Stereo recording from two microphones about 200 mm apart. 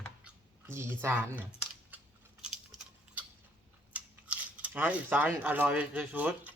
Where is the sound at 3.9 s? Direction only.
5° right (ahead or behind).